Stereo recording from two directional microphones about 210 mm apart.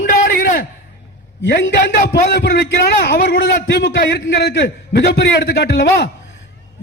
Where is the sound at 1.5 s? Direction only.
50° left (ahead or behind).